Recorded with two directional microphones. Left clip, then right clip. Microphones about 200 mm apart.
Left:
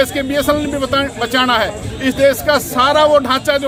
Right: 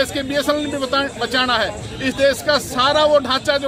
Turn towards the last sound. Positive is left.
turn(degrees=10)  # may be behind; listen again after turning